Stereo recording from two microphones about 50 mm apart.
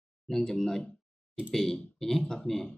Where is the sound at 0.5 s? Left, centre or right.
Centre.